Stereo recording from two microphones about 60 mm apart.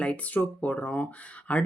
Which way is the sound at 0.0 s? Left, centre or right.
Left.